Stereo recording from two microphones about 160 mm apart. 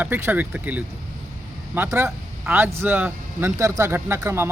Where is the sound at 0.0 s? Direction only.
10° right (ahead or behind).